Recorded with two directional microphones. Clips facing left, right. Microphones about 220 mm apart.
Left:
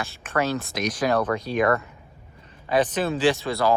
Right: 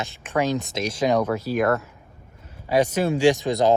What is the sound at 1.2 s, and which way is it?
Speech, 5° right (ahead or behind).